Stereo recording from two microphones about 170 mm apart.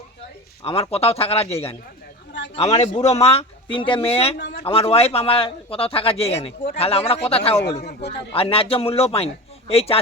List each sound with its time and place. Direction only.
0.6 s speech: 35° left (ahead or behind)
4.4 s a man's voice: 70° left (ahead or behind)
4.6 s speech: 35° left (ahead or behind)
7.8 s a man's voice: 65° left (ahead or behind)
8.3 s speech: 35° left (ahead or behind)